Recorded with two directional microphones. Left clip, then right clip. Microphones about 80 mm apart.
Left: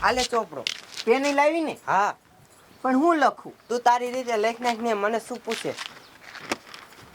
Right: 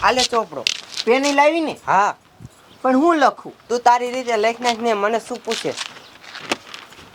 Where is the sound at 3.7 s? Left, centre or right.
Centre.